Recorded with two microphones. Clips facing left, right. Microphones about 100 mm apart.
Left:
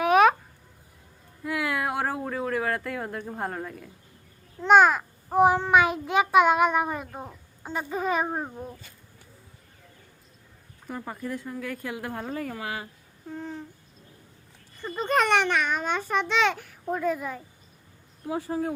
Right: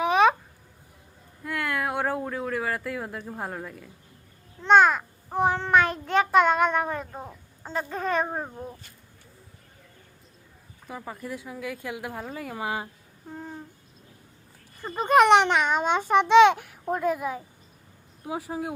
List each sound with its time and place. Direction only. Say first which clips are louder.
0.0 s a sound: left 1 dB; 5° left (ahead or behind)
1.5 s a sound: left 1 dB; 5° left (ahead or behind)
4.6 s a child's voice: even; 5° left (ahead or behind)
10.8 s speech: left 2 dB; 5° right (ahead or behind)
12.5 s speech: right 3 dB; 25° right (ahead or behind)
14.9 s a child's voice: right 6 dB; 10° right (ahead or behind)
16.9 s a child's voice: right 2 dB; 5° right (ahead or behind)